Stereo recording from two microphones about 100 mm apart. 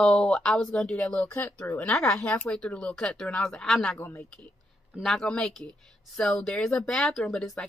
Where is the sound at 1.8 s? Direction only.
5° left (ahead or behind).